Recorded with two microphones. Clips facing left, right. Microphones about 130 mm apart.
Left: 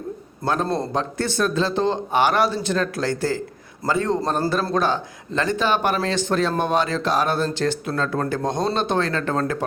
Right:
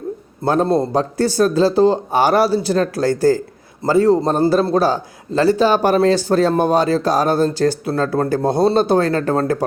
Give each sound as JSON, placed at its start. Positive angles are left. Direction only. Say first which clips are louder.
{"t": 0.4, "sound": "a man's voice", "louder": "right 7 dB", "side_deg": -30}
{"t": 0.9, "sound": "speech", "louder": "right 7 dB", "side_deg": -35}